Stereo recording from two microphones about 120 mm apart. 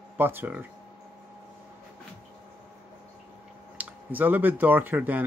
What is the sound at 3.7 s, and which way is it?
Speech, 15° right (ahead or behind).